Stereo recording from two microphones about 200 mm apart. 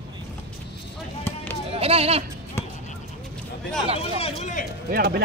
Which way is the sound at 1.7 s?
30° right (ahead or behind).